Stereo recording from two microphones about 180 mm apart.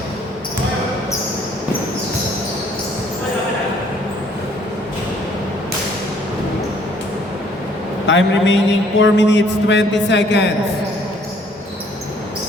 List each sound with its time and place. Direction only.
8.0 s a man's voice: 85° left